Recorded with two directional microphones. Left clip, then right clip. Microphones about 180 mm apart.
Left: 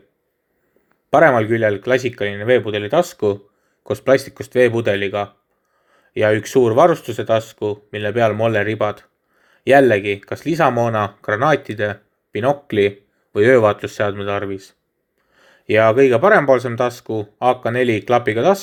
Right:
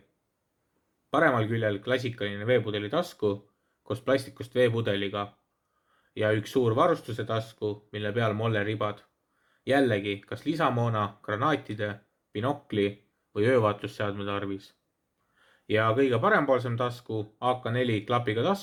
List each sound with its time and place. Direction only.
1.1 s speech: 30° left (ahead or behind)